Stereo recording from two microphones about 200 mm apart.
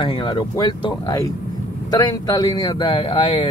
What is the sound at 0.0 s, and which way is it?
Speech, 25° left (ahead or behind).